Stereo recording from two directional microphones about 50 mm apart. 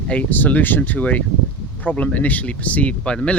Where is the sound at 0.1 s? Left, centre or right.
Left.